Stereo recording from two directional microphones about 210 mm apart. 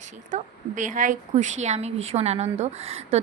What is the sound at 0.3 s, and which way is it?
A woman's voice, 35° right (ahead or behind).